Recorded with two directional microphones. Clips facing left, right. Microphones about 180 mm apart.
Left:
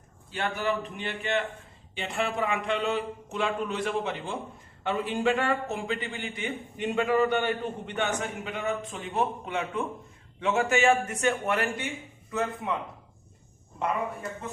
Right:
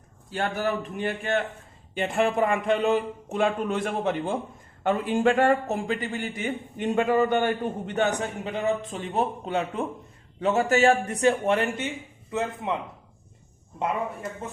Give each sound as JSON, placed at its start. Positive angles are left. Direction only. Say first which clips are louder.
{"t": 0.3, "sound": "a man's voice", "louder": "right 2 dB", "side_deg": -45}